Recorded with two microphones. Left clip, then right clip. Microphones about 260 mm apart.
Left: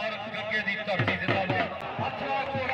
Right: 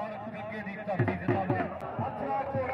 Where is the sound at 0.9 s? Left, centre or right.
Centre.